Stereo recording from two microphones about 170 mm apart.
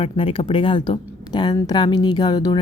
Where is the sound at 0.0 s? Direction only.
30° left (ahead or behind).